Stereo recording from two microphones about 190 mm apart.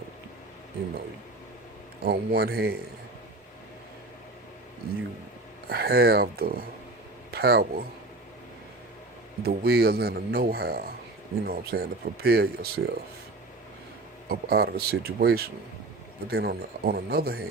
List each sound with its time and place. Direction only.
2.0 s speech: 55° right (ahead or behind)
5.6 s speech: 55° right (ahead or behind)
9.4 s speech: 55° right (ahead or behind)
14.3 s speech: 55° right (ahead or behind)